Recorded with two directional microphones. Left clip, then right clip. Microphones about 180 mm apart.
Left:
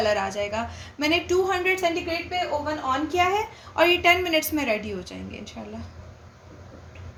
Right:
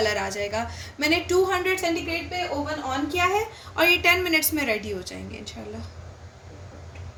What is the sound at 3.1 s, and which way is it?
A woman's voice, 50° left (ahead or behind).